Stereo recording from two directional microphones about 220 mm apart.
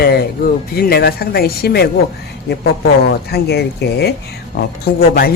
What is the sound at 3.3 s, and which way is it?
A man's voice, 50° left (ahead or behind).